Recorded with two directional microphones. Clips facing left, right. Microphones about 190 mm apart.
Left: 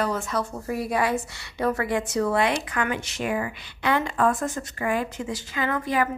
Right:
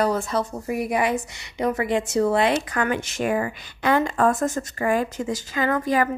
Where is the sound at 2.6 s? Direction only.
40° right (ahead or behind).